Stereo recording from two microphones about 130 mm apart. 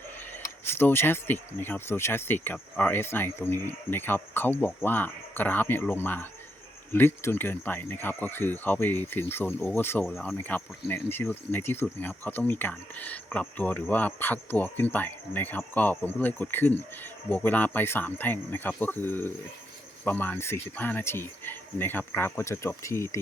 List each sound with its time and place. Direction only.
0.6 s speech: 15° left (ahead or behind)